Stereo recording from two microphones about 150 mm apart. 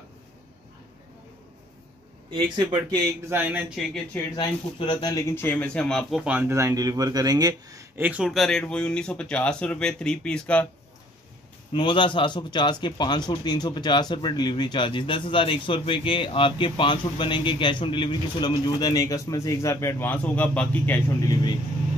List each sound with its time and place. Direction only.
2.3 s speech: 30° right (ahead or behind)
3.3 s speech: 10° right (ahead or behind)
4.4 s speech: 30° left (ahead or behind)
5.3 s a man's voice: 15° left (ahead or behind)
6.2 s speech: 15° right (ahead or behind)
8.0 s speech: 5° right (ahead or behind); by 10.7 s 10° left (ahead or behind)
11.7 s speech: 35° left (ahead or behind)